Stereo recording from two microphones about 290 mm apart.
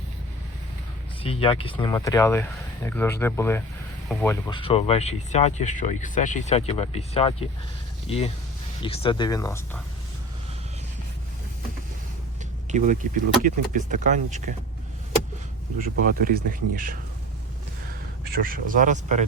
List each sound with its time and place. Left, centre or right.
1.2 s speech: centre
12.7 s speech: right
15.8 s speech: right
18.3 s speech: right